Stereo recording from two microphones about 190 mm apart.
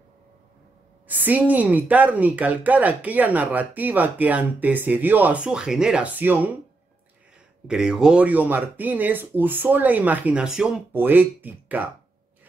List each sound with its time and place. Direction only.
1.0 s a woman's voice: 10° right (ahead or behind)
7.6 s a woman's voice: 5° right (ahead or behind)